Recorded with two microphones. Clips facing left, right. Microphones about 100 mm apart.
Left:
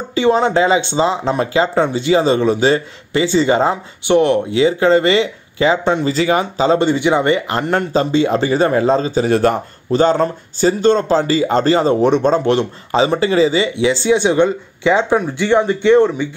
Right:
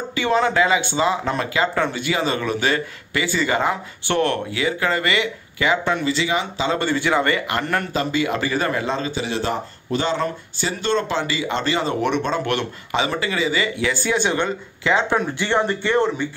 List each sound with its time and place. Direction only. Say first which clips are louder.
0.1 s speech: left 6 dB; 30° left (ahead or behind)
6.0 s speech: left 6 dB; 40° left (ahead or behind)
6.8 s speech: left 6 dB; 20° left (ahead or behind); by 9.6 s 50° left (ahead or behind)
9.8 s speech: left 9 dB; 40° left (ahead or behind); by 16.3 s 15° left (ahead or behind)